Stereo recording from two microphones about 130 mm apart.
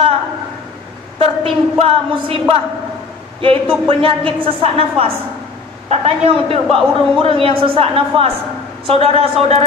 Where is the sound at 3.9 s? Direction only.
45° right (ahead or behind).